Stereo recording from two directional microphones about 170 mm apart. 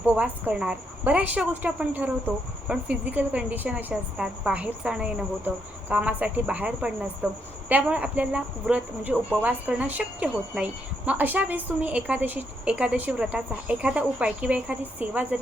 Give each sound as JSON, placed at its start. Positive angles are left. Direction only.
{"t": 0.0, "sound": "a woman's voice", "side_deg": -10}